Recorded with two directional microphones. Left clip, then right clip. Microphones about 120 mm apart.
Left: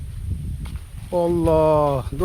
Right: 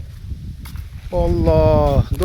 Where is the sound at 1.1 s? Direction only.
35° left (ahead or behind).